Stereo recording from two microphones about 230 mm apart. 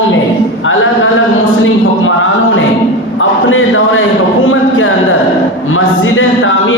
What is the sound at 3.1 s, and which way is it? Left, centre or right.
Speech, left.